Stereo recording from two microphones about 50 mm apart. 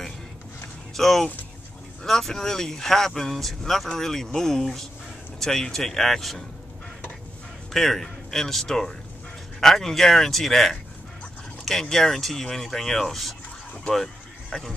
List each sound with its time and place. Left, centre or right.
0.9 s speech: centre
7.7 s speech: centre
11.8 s speech: centre
13.9 s a sound: centre